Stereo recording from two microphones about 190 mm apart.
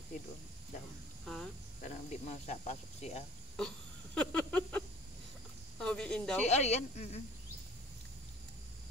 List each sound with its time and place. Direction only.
1.2 s cricket: 5° left (ahead or behind)
1.8 s speech: 40° left (ahead or behind)
3.5 s a sound: 5° left (ahead or behind)
5.8 s speech: 5° left (ahead or behind)
6.4 s speech: 35° left (ahead or behind)